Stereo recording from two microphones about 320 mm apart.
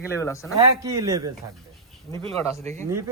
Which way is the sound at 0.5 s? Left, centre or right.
Centre.